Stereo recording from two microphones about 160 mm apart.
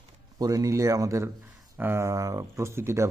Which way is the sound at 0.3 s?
20° right (ahead or behind).